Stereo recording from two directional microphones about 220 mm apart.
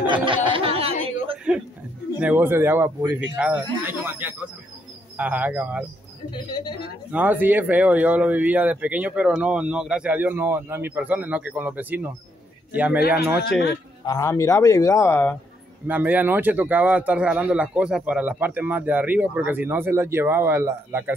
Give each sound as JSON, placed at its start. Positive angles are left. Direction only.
{"t": 0.0, "sound": "a sound", "side_deg": -20}
{"t": 1.5, "sound": "a sound", "side_deg": -5}
{"t": 2.1, "sound": "a man's voice", "side_deg": -10}
{"t": 6.3, "sound": "a woman's voice", "side_deg": 20}
{"t": 7.1, "sound": "a man's voice", "side_deg": -5}
{"t": 14.0, "sound": "speech", "side_deg": 15}
{"t": 15.9, "sound": "a man's voice", "side_deg": -5}